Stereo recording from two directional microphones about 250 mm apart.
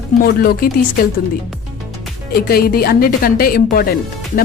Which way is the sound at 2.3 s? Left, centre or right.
Left.